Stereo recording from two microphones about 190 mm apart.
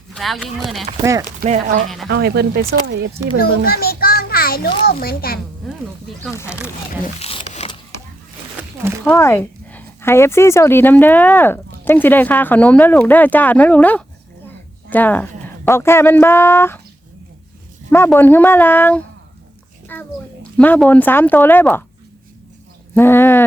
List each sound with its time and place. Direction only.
0.1 s speech: centre (ahead or behind)
1.4 s speech: 40° right (ahead or behind)
2.0 s speech: 55° right (ahead or behind)
3.2 s a child's voice: 15° right (ahead or behind)
3.7 s a child's voice: 50° left (ahead or behind)
5.6 s speech: centre (ahead or behind)
7.2 s zipper: 30° left (ahead or behind)
9.0 s a woman's voice: 15° left (ahead or behind)
18.1 s a child's voice: 10° left (ahead or behind)
23.0 s speech: 10° left (ahead or behind)